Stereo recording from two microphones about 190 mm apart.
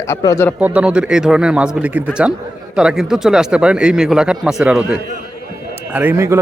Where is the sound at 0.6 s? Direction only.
5° right (ahead or behind).